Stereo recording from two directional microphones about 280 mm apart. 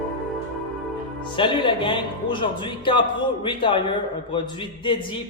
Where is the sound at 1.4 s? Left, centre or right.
Centre.